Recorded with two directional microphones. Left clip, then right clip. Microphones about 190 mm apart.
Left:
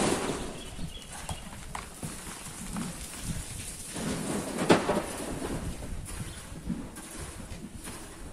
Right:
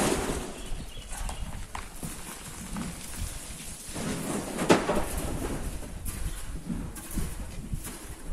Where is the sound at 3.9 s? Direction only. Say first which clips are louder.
Right 1 dB; 30° right (ahead or behind).